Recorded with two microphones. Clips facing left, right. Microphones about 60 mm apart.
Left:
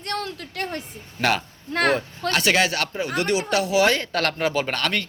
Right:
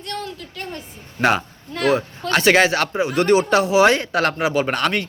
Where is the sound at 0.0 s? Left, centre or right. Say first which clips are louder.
Left 1 dB; left.